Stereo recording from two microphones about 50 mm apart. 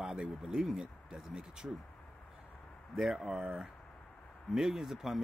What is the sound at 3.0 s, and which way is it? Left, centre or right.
Speech, centre.